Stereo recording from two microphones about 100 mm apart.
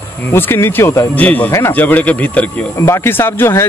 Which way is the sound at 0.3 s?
25° left (ahead or behind).